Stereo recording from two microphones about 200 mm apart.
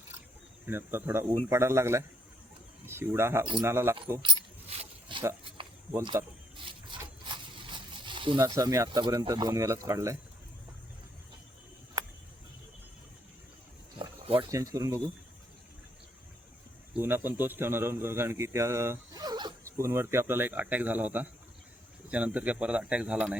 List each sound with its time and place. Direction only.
0.6 s a man's voice: 10° right (ahead or behind)
3.4 s speech: 25° right (ahead or behind)
3.7 s a man's voice: 10° right (ahead or behind)
4.2 s coin: 25° right (ahead or behind)
6.0 s a sound: 20° right (ahead or behind)
14.0 s speech: 25° right (ahead or behind)
16.9 s a man's voice: 10° right (ahead or behind)